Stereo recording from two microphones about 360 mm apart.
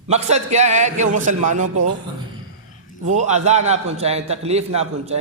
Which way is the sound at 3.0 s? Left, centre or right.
Centre.